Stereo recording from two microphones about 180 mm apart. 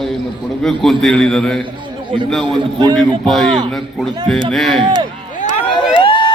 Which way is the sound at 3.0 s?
Centre (ahead or behind).